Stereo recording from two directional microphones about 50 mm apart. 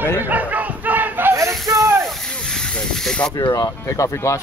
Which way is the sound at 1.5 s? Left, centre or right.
Centre.